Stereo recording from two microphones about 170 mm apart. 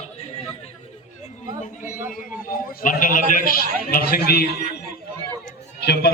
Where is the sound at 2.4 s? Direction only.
55° left (ahead or behind).